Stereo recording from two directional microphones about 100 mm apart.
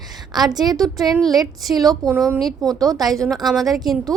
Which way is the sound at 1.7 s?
40° right (ahead or behind).